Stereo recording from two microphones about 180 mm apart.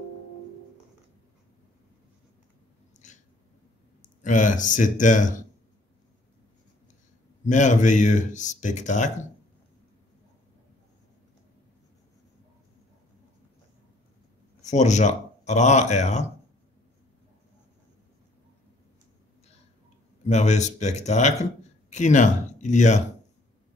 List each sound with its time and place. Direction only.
2.9 s a sound: 40° left (ahead or behind)
4.2 s speech: 45° left (ahead or behind)
7.4 s speech: 45° left (ahead or behind)
14.6 s speech: 40° left (ahead or behind)
20.2 s speech: 40° left (ahead or behind)